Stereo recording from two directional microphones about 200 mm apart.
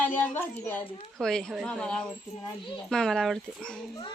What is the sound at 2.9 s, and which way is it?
Speech, 5° left (ahead or behind).